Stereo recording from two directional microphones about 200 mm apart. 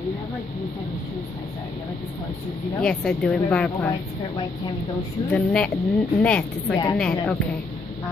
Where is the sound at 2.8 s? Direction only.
5° left (ahead or behind).